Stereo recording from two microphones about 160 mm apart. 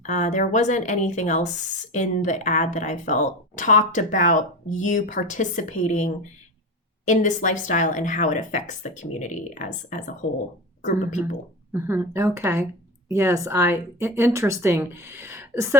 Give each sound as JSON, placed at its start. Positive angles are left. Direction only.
{"t": 0.0, "sound": "speech", "side_deg": 50}
{"t": 11.7, "sound": "speech", "side_deg": -15}